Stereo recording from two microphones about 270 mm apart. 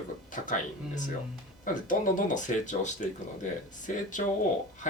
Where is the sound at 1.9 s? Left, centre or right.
Left.